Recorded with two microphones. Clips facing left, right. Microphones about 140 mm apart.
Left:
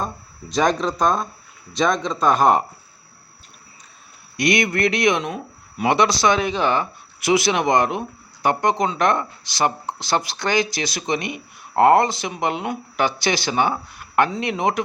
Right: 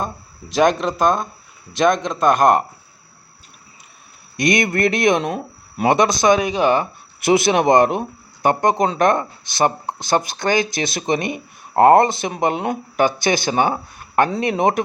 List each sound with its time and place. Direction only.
0.0 s speech: centre (ahead or behind)
4.4 s speech: 50° right (ahead or behind)
6.4 s speech: 15° right (ahead or behind)
6.7 s speech: 50° right (ahead or behind)